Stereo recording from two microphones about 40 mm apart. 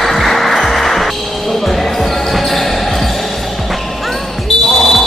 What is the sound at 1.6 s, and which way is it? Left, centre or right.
Basketball bounce, centre.